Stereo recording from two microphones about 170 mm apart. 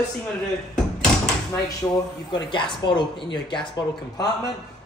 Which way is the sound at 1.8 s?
15° left (ahead or behind).